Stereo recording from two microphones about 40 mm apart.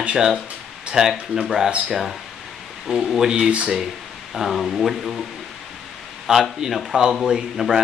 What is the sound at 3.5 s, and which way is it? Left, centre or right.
Speech, right.